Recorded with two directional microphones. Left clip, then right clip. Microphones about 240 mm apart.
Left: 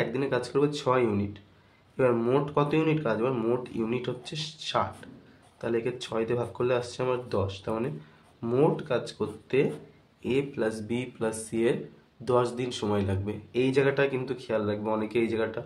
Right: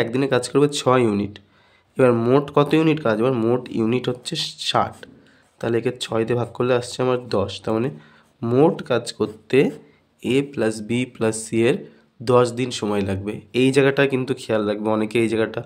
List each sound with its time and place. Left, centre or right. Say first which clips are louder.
0.0 s speech: right 8 dB; right